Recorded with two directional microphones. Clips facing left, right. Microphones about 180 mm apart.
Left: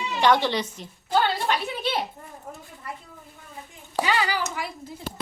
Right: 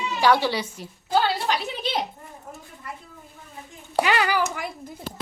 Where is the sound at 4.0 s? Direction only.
65° right (ahead or behind).